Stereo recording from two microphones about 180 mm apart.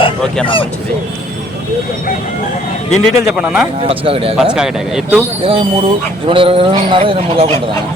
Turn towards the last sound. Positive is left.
turn(degrees=-30)  # may be behind; listen again after turning